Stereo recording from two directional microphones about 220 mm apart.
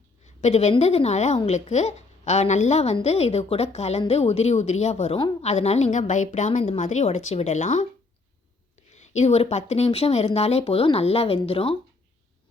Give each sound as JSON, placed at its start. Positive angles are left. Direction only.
{"t": 0.3, "sound": "a woman's voice", "side_deg": 30}
{"t": 8.9, "sound": "speech", "side_deg": 30}